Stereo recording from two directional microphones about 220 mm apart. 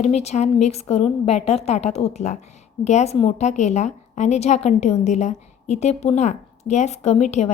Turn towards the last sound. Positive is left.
turn(degrees=30)  # may be behind; listen again after turning